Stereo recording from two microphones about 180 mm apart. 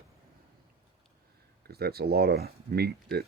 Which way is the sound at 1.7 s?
60° right (ahead or behind).